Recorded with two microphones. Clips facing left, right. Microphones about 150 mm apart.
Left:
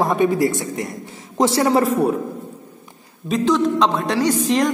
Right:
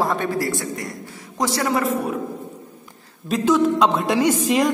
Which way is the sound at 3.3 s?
5° right (ahead or behind).